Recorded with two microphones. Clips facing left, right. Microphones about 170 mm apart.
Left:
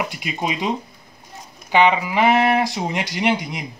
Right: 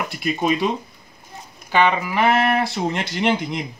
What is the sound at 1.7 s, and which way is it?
Speech, 15° left (ahead or behind).